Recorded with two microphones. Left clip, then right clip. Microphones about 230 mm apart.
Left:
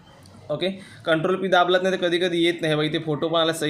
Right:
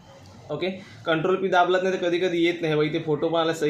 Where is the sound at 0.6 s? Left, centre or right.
Left.